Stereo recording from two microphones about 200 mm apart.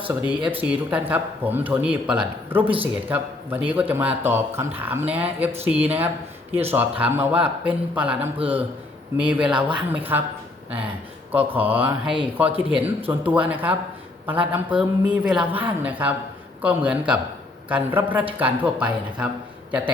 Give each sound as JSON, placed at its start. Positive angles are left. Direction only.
{"t": 0.3, "sound": "a man's voice", "side_deg": -5}
{"t": 11.3, "sound": "a man's voice", "side_deg": -10}
{"t": 12.5, "sound": "speech", "side_deg": -30}
{"t": 12.8, "sound": "a man's voice", "side_deg": -10}